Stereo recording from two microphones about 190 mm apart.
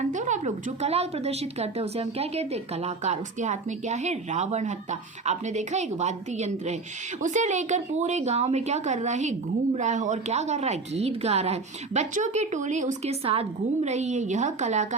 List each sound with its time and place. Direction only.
0.0 s a woman's voice: 40° right (ahead or behind)